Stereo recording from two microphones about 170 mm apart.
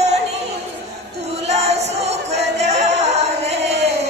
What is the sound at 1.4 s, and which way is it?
Music, 40° right (ahead or behind).